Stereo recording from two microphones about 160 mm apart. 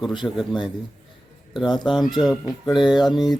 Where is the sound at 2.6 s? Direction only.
30° left (ahead or behind).